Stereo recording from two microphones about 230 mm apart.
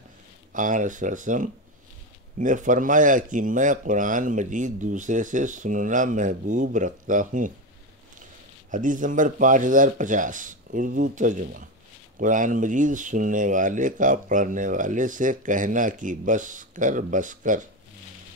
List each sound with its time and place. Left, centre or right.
0.5 s speech: right
8.7 s speech: right